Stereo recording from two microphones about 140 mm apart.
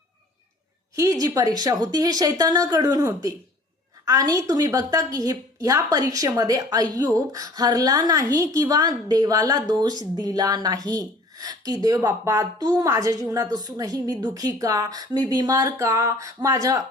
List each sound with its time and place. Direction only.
0.9 s speech: 25° right (ahead or behind)